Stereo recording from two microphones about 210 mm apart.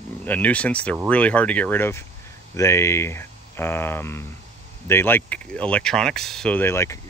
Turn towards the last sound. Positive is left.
turn(degrees=15)  # may be behind; listen again after turning